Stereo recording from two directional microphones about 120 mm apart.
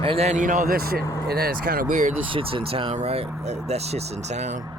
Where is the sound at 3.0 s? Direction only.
60° right (ahead or behind).